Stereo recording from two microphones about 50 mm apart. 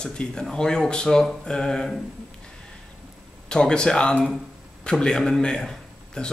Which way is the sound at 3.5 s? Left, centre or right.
Centre.